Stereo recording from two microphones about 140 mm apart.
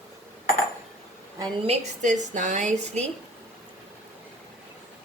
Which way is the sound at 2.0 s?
65° right (ahead or behind).